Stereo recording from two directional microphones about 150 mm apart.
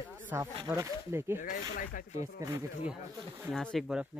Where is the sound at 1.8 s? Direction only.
60° left (ahead or behind).